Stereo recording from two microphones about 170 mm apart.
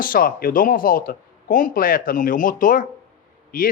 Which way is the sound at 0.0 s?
55° left (ahead or behind).